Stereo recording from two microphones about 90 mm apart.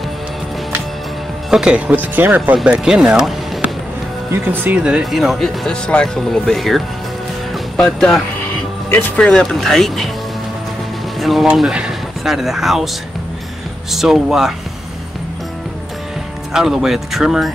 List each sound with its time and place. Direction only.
1.5 s speech: 10° right (ahead or behind)
2.0 s speech: 20° right (ahead or behind)
4.3 s speech: 25° right (ahead or behind)
4.8 s speech: 5° right (ahead or behind)
11.1 s speech: centre (ahead or behind)
13.9 s speech: 5° right (ahead or behind)
16.5 s speech: 5° right (ahead or behind)